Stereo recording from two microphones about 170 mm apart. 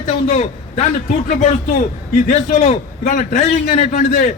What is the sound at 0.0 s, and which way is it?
A man's voice, 45° left (ahead or behind).